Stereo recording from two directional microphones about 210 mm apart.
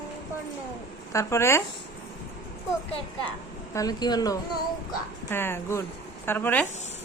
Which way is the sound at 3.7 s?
15° left (ahead or behind).